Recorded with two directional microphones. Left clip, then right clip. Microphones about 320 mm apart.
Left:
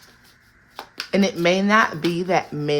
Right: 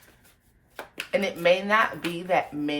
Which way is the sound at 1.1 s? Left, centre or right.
Left.